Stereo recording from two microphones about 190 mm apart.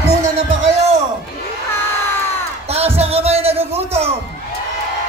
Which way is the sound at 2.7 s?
35° right (ahead or behind).